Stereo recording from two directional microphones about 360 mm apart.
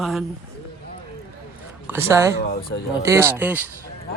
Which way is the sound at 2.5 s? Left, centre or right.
Left.